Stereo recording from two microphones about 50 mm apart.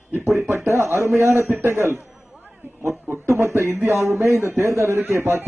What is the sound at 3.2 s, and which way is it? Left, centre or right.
A man's voice, right.